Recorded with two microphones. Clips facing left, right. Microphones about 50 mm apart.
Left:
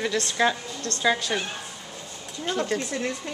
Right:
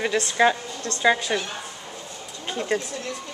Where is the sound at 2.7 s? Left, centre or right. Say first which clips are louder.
Right 7 dB; right.